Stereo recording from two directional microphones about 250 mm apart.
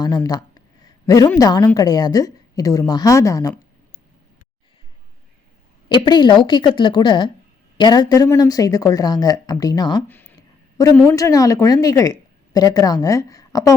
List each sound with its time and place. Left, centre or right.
0.0 s a woman's voice: centre
5.9 s a woman's voice: centre